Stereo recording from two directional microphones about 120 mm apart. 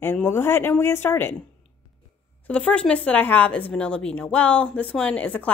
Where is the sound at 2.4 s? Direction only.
10° left (ahead or behind).